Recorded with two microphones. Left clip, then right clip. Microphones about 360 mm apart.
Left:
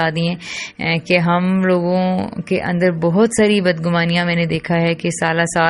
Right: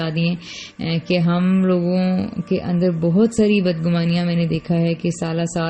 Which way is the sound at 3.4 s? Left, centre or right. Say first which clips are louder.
Left 3 dB; centre.